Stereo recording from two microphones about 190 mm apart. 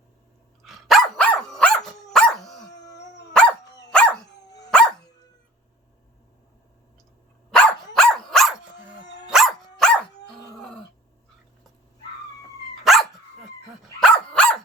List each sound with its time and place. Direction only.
0.6 s dog: centre (ahead or behind)
2.8 s dog: 20° left (ahead or behind)
3.3 s dog: 5° left (ahead or behind)
4.4 s dog: 20° left (ahead or behind)
4.7 s dog: 5° left (ahead or behind)
7.5 s dog: 5° left (ahead or behind)
10.6 s a sound: 5° left (ahead or behind)
12.8 s dog: centre (ahead or behind)